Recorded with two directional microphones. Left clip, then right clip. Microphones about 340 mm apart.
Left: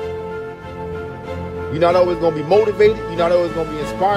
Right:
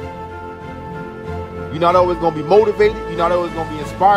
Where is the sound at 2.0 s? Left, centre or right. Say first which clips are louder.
Right 1 dB; right.